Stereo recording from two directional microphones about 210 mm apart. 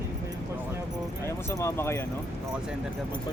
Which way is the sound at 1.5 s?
15° left (ahead or behind).